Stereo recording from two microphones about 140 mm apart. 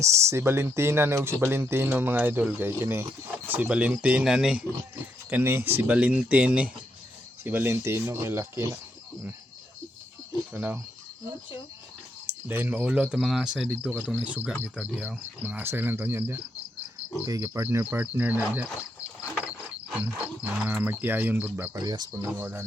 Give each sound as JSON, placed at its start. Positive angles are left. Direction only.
{"t": 0.0, "sound": "speech", "side_deg": -20}
{"t": 5.3, "sound": "speech", "side_deg": -15}
{"t": 10.5, "sound": "speech", "side_deg": -10}
{"t": 12.2, "sound": "speech", "side_deg": -15}
{"t": 20.0, "sound": "speech", "side_deg": -10}
{"t": 21.8, "sound": "speech", "side_deg": -25}